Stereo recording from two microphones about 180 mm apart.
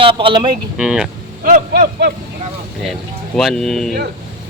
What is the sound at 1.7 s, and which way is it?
Speech, 65° right (ahead or behind).